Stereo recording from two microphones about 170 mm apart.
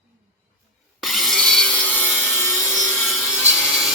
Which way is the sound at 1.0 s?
Centre (ahead or behind).